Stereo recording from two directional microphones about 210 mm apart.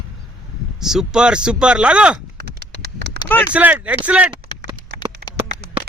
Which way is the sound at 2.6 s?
55° right (ahead or behind).